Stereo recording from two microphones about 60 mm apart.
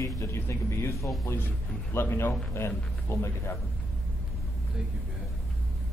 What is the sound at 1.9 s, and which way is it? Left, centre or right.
A man's voice, left.